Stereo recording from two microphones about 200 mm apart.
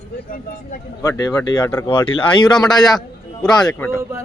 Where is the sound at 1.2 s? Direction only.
15° left (ahead or behind).